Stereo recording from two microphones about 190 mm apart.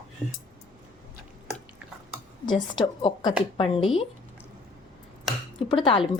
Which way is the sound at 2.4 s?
25° left (ahead or behind).